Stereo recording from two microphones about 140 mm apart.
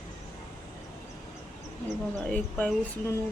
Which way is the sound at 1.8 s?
5° left (ahead or behind).